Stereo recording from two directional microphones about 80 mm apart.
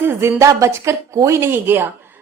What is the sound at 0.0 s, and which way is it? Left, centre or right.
A woman's voice, right.